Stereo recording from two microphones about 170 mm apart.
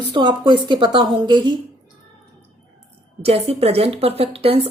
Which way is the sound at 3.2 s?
35° right (ahead or behind).